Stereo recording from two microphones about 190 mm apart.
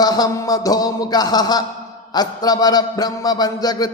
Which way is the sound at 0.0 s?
20° left (ahead or behind).